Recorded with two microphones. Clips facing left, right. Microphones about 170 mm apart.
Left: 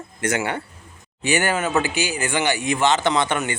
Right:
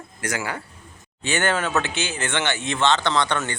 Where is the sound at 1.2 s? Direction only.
10° left (ahead or behind).